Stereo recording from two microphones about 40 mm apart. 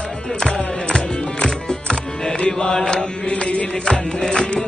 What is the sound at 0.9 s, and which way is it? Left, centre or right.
Music, centre.